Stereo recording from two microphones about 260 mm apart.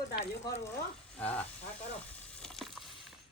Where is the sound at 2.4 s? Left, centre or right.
Centre.